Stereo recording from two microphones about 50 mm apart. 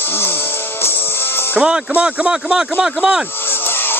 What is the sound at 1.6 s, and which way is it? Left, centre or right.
Speech, centre.